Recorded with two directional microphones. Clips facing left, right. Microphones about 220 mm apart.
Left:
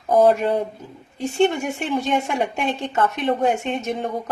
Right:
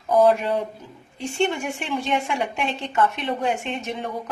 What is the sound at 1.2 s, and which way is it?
A woman's voice, 40° left (ahead or behind).